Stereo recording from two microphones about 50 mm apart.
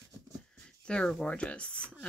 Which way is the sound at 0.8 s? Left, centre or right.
Left.